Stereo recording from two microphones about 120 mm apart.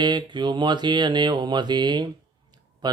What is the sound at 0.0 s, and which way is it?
Mantra, 40° right (ahead or behind).